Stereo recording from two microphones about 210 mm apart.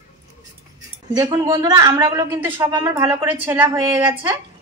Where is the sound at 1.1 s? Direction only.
15° right (ahead or behind).